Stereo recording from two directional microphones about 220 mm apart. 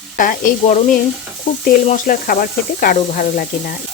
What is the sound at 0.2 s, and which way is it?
Speech, 40° left (ahead or behind).